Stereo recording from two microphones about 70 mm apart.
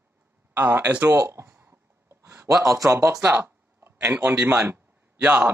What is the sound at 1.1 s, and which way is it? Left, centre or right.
Speech, right.